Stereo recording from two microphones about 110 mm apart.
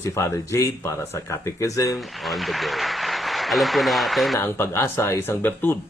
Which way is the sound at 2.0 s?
Centre (ahead or behind).